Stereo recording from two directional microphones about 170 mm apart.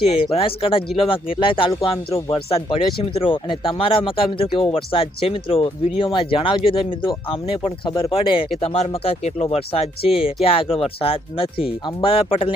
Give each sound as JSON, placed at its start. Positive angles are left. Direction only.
{"t": 0.0, "sound": "speech", "side_deg": 35}